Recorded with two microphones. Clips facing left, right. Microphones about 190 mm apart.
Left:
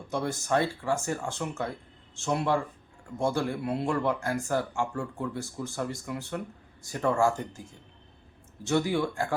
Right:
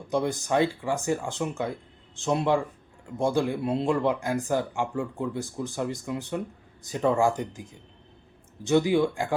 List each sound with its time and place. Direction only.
0.1 s speech: 15° right (ahead or behind)